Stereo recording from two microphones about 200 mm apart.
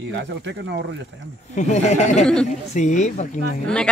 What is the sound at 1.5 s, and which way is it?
Speech, 35° left (ahead or behind).